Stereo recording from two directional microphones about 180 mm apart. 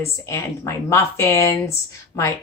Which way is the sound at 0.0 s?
15° left (ahead or behind).